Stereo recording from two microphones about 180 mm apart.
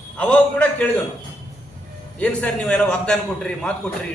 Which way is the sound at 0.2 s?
5° left (ahead or behind).